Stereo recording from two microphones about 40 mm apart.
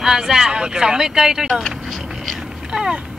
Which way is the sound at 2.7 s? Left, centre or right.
Centre.